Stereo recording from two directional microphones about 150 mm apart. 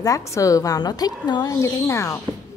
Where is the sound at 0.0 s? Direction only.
20° left (ahead or behind).